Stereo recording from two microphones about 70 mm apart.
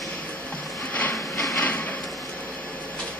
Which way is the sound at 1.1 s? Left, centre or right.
Left.